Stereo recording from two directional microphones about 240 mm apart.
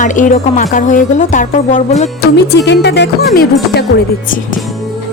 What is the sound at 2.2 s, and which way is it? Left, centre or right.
Music, left.